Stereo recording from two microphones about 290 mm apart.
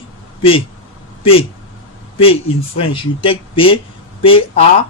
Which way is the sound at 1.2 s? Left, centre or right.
Centre.